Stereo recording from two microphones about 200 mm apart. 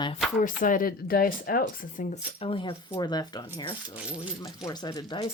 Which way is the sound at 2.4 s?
25° left (ahead or behind).